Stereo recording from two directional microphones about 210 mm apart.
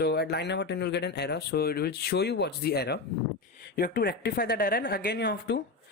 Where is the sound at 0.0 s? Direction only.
50° left (ahead or behind).